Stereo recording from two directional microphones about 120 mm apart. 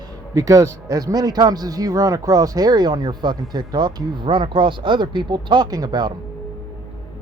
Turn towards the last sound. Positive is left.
turn(degrees=-35)  # may be behind; listen again after turning